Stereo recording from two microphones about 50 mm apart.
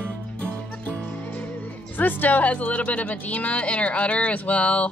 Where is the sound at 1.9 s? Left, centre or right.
Left.